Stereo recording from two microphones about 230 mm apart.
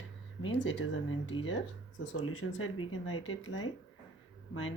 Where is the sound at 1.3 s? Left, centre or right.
Left.